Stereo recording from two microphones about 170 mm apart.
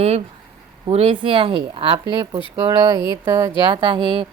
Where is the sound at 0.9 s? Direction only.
35° right (ahead or behind).